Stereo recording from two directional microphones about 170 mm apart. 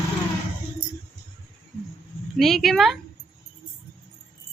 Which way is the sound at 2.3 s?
Centre (ahead or behind).